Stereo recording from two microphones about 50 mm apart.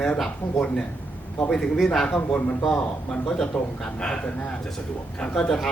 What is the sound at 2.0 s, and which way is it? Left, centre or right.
Speech, left.